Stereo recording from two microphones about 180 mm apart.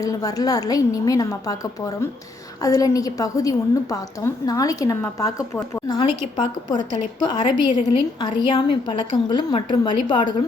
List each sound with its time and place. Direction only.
0.0 s a woman's voice: 20° left (ahead or behind)